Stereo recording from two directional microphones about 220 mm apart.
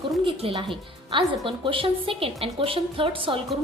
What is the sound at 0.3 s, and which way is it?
A woman's voice, 25° right (ahead or behind).